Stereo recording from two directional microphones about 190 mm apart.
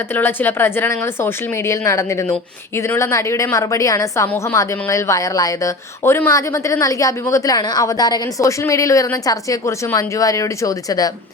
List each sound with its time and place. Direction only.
0.1 s speech: 10° left (ahead or behind)